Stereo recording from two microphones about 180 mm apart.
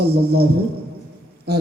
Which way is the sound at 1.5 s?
65° right (ahead or behind).